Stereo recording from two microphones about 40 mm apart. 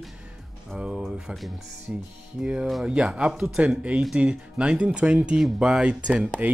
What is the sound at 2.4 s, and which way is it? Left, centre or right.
Speech, centre.